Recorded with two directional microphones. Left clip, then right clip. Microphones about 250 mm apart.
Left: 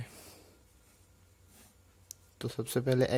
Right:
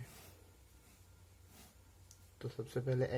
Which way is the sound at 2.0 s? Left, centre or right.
Left.